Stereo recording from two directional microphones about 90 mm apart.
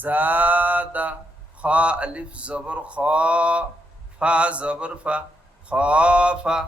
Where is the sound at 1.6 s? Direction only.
15° right (ahead or behind).